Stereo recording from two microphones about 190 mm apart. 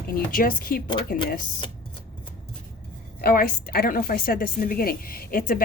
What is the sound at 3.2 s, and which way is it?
A woman's voice, 50° left (ahead or behind).